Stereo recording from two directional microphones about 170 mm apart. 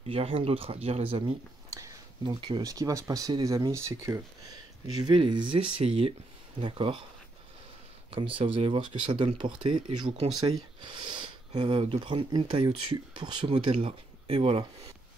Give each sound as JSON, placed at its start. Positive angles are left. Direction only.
{"t": 0.0, "sound": "speech", "side_deg": -35}
{"t": 1.7, "sound": "speech", "side_deg": -20}
{"t": 8.1, "sound": "speech", "side_deg": -30}